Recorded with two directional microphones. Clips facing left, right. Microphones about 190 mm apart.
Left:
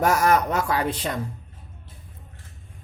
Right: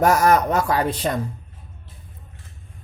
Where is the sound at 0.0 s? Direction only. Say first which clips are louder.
Right 3 dB; 40° right (ahead or behind).